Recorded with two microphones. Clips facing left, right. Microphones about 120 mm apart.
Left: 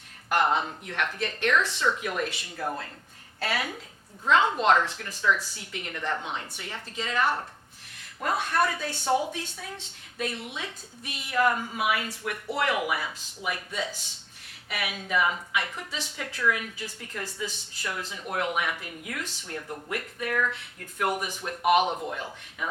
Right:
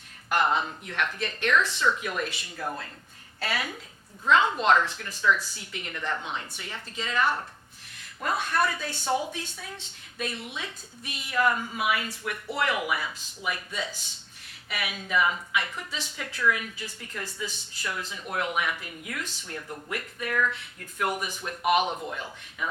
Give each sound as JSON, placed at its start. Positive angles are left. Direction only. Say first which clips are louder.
{"t": 0.3, "sound": "a woman's voice", "louder": "left 1 dB", "side_deg": 50}
{"t": 2.0, "sound": "a woman's voice", "louder": "left 1 dB", "side_deg": 50}
{"t": 2.6, "sound": "speech", "louder": "left 2 dB", "side_deg": 40}
{"t": 3.4, "sound": "a woman's voice", "louder": "left 1 dB", "side_deg": 50}
{"t": 5.2, "sound": "speech", "louder": "right 1 dB", "side_deg": 35}
{"t": 5.5, "sound": "a woman's voice", "louder": "left 1 dB", "side_deg": 50}
{"t": 16.0, "sound": "speech", "louder": "left 1 dB", "side_deg": 65}
{"t": 16.2, "sound": "a woman's voice", "louder": "right 1 dB", "side_deg": 45}
{"t": 17.2, "sound": "speech", "louder": "left 2 dB", "side_deg": 35}
{"t": 17.5, "sound": "speech", "louder": "even", "side_deg": 70}
{"t": 17.9, "sound": "a woman's voice", "louder": "left 1 dB", "side_deg": 45}
{"t": 19.5, "sound": "a woman's voice", "louder": "left 3 dB", "side_deg": 35}
{"t": 21.8, "sound": "a man's voice", "louder": "left 2 dB", "side_deg": 15}
{"t": 22.1, "sound": "a woman's voice", "louder": "left 1 dB", "side_deg": 45}